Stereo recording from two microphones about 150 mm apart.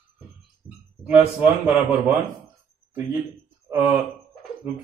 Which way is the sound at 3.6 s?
15° right (ahead or behind).